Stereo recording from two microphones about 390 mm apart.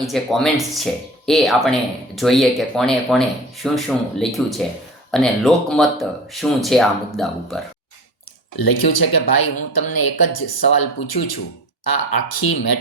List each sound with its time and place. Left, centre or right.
0.0 s speech: centre
8.5 s speech: left